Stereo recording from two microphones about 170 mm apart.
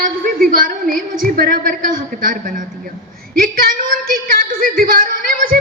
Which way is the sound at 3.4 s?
55° right (ahead or behind).